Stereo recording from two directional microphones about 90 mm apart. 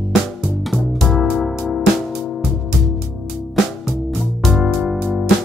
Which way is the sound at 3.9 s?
Centre (ahead or behind).